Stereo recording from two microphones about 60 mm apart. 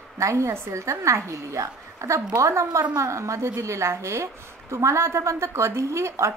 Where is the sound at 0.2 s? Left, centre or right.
Right.